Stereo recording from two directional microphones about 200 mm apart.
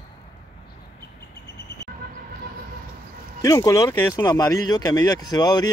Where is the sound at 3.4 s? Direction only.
15° left (ahead or behind).